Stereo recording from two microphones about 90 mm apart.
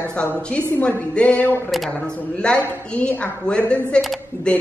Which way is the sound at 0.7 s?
25° left (ahead or behind).